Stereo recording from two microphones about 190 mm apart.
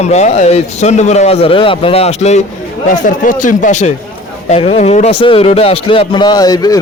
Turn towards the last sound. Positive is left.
turn(degrees=20)  # may be behind; listen again after turning